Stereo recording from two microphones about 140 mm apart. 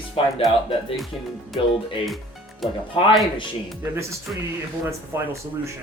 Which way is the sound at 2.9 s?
40° left (ahead or behind).